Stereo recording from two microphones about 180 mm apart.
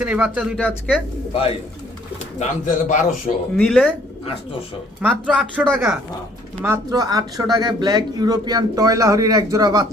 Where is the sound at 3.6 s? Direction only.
5° left (ahead or behind).